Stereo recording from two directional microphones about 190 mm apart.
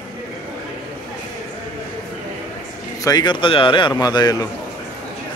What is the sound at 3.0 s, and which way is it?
Speech, 20° left (ahead or behind).